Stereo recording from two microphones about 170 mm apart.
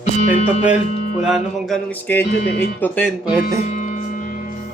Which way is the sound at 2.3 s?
75° left (ahead or behind).